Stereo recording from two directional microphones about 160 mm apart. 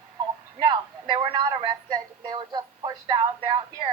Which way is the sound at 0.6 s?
30° right (ahead or behind).